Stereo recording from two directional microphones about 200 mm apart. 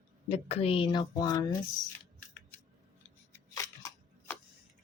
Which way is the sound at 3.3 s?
15° left (ahead or behind).